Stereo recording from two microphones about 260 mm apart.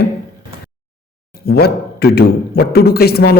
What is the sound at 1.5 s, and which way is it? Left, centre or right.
Speech, left.